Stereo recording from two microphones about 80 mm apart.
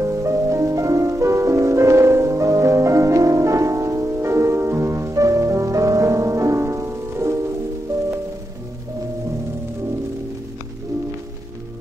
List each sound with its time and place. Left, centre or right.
0.0 s music: right